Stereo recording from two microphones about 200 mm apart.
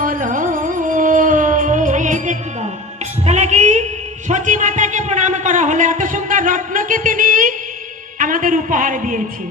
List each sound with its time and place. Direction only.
0.0 s music: 40° right (ahead or behind)
4.3 s a sound: 35° right (ahead or behind)
8.2 s a woman's voice: 40° right (ahead or behind)